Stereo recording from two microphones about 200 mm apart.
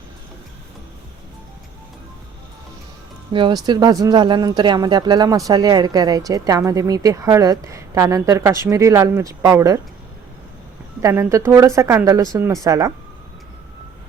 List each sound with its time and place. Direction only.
3.3 s speech: 20° right (ahead or behind)
11.0 s speech: 15° right (ahead or behind)